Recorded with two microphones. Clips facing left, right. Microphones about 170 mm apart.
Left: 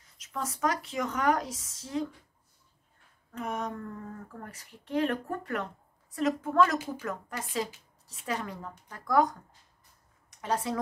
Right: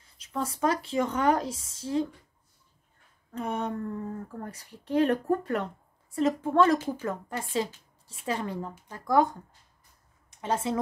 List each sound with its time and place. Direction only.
0.0 s speech: 30° right (ahead or behind)
3.3 s speech: 30° right (ahead or behind)
10.4 s speech: 25° right (ahead or behind)